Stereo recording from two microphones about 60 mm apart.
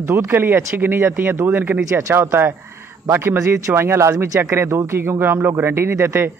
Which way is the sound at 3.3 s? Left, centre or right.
Right.